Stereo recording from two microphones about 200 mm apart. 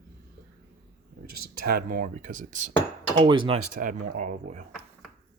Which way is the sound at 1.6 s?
50° right (ahead or behind).